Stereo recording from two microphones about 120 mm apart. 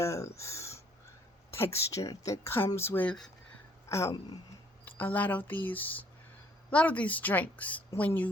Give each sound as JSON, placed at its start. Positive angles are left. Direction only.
{"t": 0.0, "sound": "a woman's voice", "side_deg": 25}